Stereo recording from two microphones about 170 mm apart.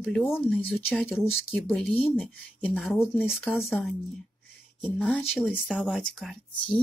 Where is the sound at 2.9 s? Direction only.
10° left (ahead or behind).